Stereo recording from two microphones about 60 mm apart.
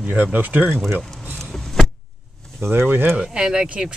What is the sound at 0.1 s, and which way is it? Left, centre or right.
Speech, right.